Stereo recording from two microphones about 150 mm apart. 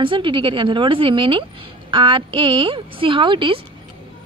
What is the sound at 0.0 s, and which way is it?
Speech, 35° right (ahead or behind).